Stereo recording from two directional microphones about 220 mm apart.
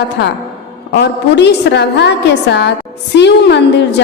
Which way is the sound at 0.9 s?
50° left (ahead or behind).